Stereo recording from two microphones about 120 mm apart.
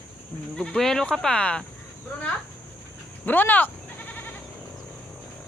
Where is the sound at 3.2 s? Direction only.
15° left (ahead or behind).